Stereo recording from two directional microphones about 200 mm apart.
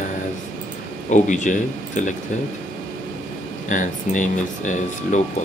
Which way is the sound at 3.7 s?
40° left (ahead or behind).